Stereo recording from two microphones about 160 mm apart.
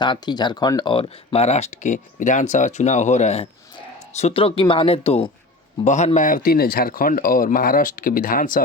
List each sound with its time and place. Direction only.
0.0 s a man's voice: 25° left (ahead or behind); by 8.6 s 60° left (ahead or behind)